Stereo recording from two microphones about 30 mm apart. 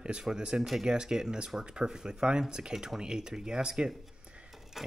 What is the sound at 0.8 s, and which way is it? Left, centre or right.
Speech, right.